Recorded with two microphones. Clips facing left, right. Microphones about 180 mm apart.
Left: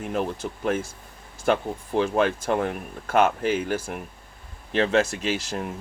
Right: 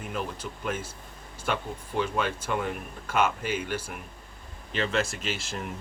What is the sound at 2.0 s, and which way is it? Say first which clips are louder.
Speech: left 6 dB; 50° left (ahead or behind).